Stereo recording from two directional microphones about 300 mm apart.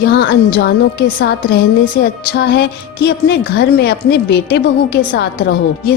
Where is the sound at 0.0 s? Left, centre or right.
Left.